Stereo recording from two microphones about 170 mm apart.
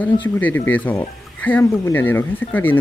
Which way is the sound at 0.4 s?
10° left (ahead or behind).